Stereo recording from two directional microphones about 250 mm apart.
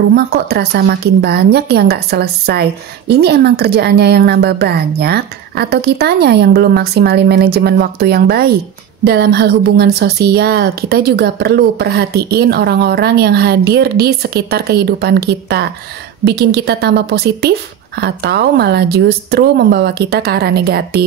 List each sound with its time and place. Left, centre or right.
0.1 s a woman's voice: right